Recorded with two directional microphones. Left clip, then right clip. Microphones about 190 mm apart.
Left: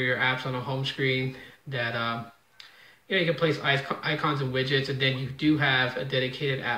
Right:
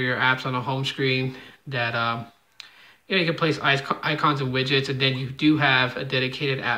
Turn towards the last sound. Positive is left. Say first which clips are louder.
# right 4 dB
turn(degrees=-30)  # may be behind; listen again after turning